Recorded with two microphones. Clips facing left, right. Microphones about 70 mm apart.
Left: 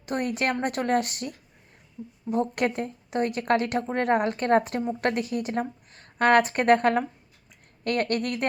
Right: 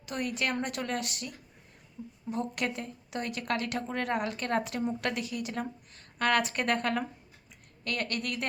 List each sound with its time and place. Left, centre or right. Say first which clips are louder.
0.0 s a woman's voice: left 6 dB; left
2.0 s a woman's voice: left 4 dB; centre
2.6 s a woman's voice: left 7 dB; left